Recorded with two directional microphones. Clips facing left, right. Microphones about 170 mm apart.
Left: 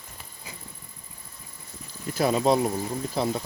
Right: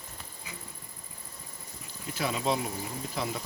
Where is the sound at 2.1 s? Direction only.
40° left (ahead or behind).